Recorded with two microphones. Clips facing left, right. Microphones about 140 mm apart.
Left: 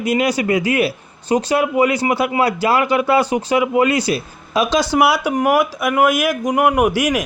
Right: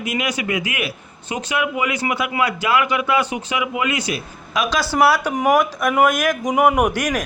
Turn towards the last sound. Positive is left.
turn(degrees=10)  # may be behind; listen again after turning